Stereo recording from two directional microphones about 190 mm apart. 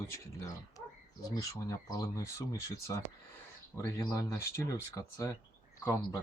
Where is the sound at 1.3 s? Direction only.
15° left (ahead or behind).